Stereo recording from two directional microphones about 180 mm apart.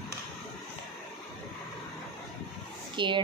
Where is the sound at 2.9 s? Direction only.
25° right (ahead or behind).